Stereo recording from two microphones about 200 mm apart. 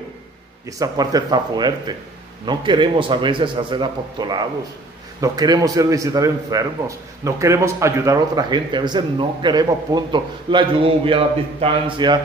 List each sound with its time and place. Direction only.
0.7 s a man's voice: 15° right (ahead or behind)